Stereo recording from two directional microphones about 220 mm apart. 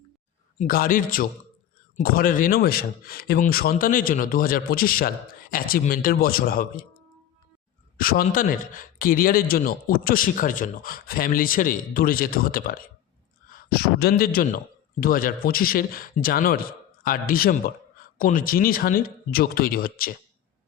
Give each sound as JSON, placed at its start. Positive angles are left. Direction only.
{"t": 0.6, "sound": "speech", "side_deg": 40}
{"t": 7.9, "sound": "a man's voice", "side_deg": 40}